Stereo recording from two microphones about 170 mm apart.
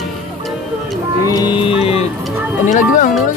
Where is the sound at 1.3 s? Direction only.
25° left (ahead or behind).